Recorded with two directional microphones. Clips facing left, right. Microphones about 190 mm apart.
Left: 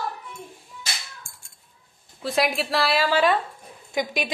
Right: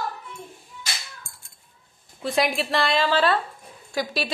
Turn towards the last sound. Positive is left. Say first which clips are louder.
# left 1 dB
turn(degrees=20)  # may be behind; listen again after turning